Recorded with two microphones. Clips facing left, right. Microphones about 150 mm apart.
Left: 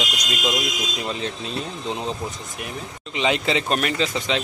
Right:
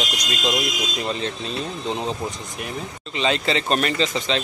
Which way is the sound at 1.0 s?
5° left (ahead or behind).